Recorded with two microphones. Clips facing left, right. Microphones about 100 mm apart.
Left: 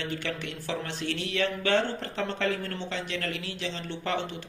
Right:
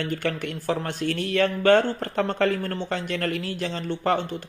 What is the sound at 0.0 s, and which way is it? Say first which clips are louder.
Speech: right 6 dB; 50° right (ahead or behind).